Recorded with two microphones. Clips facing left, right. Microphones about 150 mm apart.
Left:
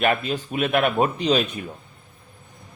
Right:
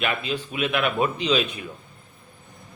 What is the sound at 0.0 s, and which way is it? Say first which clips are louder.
Speech: left 5 dB; 45° left (ahead or behind).